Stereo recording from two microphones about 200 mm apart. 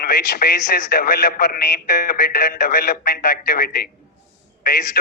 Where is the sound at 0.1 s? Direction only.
50° left (ahead or behind).